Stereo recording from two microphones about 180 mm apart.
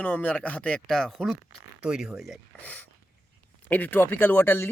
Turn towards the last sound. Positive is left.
turn(degrees=10)  # may be behind; listen again after turning